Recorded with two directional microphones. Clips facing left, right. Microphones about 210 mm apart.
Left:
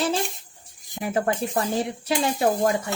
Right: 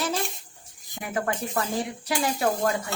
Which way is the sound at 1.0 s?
30° left (ahead or behind).